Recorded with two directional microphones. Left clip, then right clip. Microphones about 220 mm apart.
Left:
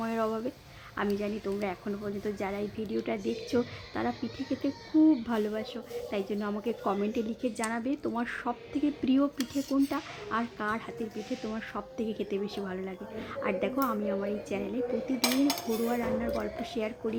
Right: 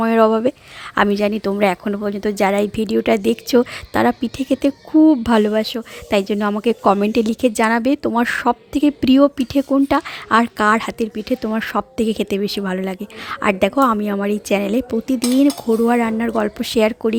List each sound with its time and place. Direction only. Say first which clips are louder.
0.0 s a woman's voice: right 17 dB; 50° right (ahead or behind)